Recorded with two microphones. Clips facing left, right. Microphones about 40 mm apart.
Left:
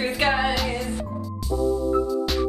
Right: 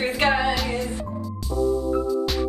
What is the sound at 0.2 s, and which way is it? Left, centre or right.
Music, centre.